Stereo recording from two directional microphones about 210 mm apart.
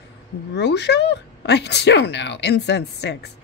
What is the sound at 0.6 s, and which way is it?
Speech, 55° left (ahead or behind).